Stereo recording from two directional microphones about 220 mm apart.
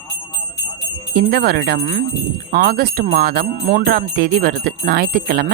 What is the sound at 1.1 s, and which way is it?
Jingle bell, 45° right (ahead or behind).